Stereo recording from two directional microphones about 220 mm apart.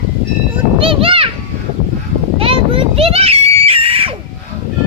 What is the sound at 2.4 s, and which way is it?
Screaming, 25° right (ahead or behind).